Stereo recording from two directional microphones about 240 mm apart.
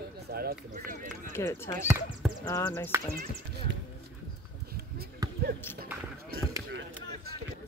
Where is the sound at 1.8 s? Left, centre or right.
Centre.